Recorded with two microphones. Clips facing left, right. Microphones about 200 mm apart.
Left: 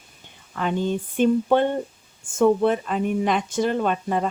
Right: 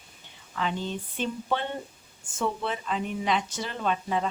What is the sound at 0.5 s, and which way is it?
Speech, 50° left (ahead or behind).